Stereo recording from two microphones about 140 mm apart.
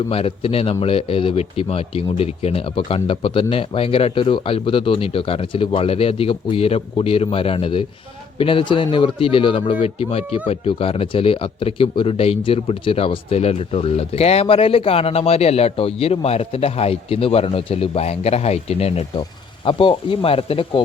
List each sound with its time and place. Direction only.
0.1 s speech: 40° left (ahead or behind)